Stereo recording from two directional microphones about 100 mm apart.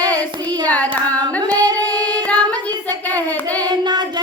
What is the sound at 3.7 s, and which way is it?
Child singing, 45° right (ahead or behind).